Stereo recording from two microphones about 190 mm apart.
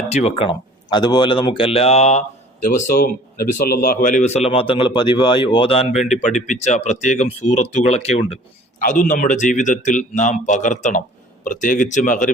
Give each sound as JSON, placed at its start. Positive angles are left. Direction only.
{"t": 0.1, "sound": "speech", "side_deg": 35}
{"t": 8.8, "sound": "speech", "side_deg": 45}